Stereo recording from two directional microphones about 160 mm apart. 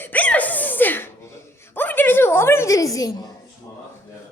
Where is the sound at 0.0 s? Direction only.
10° left (ahead or behind).